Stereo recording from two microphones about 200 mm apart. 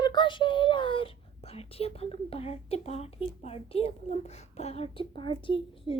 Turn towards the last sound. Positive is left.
turn(degrees=25)  # may be behind; listen again after turning